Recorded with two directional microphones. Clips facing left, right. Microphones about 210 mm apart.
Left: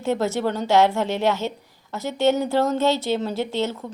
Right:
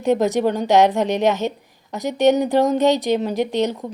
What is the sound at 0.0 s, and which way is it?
A woman's voice, 15° right (ahead or behind).